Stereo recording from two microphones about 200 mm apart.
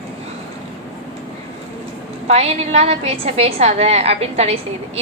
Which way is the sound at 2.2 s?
30° right (ahead or behind).